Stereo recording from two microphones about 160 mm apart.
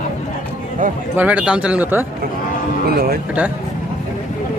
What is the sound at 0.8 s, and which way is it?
Speech, 55° right (ahead or behind).